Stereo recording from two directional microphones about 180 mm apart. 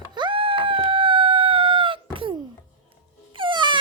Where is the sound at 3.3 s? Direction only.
25° right (ahead or behind).